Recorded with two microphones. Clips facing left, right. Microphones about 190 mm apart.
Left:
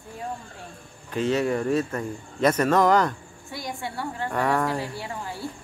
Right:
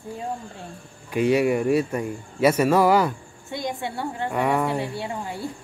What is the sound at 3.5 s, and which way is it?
Speech, 20° right (ahead or behind).